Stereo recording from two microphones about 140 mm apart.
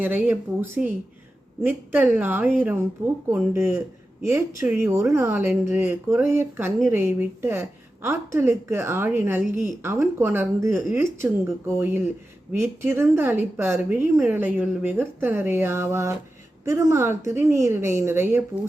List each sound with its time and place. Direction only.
0.0 s a woman's voice: 10° right (ahead or behind)